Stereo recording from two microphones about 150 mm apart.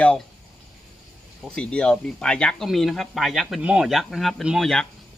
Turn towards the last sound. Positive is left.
turn(degrees=5)  # may be behind; listen again after turning